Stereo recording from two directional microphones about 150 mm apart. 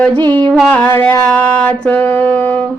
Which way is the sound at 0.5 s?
10° left (ahead or behind).